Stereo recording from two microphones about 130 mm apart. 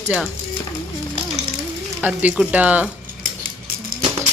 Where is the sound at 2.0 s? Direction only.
10° right (ahead or behind).